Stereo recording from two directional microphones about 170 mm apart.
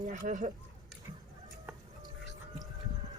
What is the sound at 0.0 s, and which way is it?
Speech, 50° right (ahead or behind).